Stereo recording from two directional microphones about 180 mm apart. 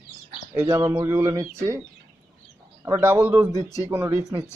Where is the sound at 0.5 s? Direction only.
15° right (ahead or behind).